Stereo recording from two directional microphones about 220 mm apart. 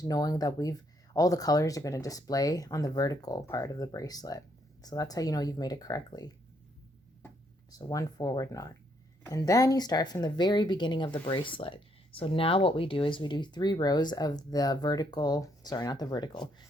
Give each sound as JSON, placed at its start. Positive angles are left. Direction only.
{"t": 0.0, "sound": "speech", "side_deg": 15}
{"t": 7.8, "sound": "speech", "side_deg": 15}